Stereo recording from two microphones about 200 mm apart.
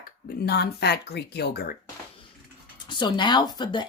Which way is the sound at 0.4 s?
55° left (ahead or behind).